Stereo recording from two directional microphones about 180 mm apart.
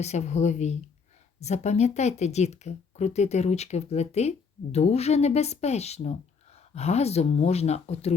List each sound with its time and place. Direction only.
0.0 s speech: 40° left (ahead or behind)